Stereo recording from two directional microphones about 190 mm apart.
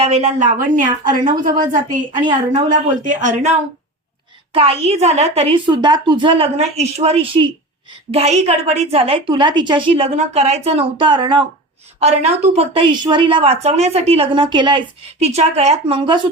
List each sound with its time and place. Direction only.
0.0 s a woman's voice: 35° right (ahead or behind)
4.5 s a woman's voice: 30° right (ahead or behind)
11.9 s a woman's voice: 35° right (ahead or behind)